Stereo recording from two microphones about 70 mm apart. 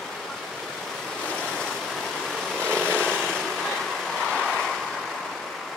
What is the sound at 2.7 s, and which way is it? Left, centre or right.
Vehicle, centre.